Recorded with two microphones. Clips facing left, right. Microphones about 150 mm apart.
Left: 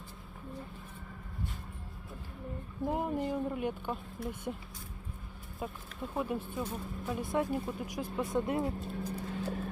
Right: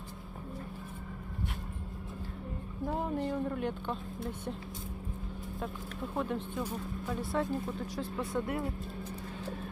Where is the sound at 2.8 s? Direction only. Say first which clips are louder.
Left 1 dB; 15° left (ahead or behind).